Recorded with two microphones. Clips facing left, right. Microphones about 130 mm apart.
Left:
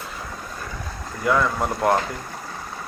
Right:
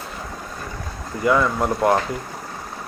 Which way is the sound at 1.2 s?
Centre (ahead or behind).